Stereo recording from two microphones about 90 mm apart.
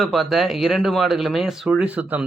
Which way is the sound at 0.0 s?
Centre (ahead or behind).